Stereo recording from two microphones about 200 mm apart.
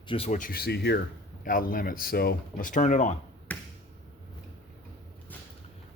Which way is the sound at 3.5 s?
5° left (ahead or behind).